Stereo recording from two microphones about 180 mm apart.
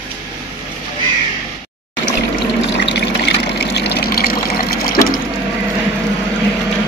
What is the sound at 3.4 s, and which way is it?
Pump, 65° left (ahead or behind).